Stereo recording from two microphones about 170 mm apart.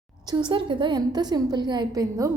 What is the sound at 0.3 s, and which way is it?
A woman's voice, 25° right (ahead or behind).